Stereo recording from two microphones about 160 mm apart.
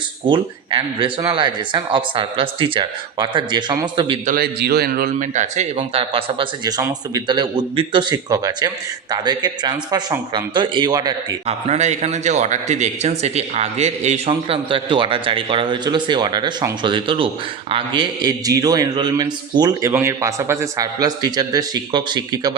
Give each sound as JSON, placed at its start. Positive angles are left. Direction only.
{"t": 0.3, "sound": "a man's voice", "side_deg": -30}
{"t": 4.3, "sound": "a man's voice", "side_deg": -75}
{"t": 11.4, "sound": "a man's voice", "side_deg": -45}